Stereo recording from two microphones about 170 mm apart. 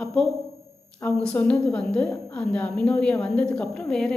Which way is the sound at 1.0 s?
10° left (ahead or behind).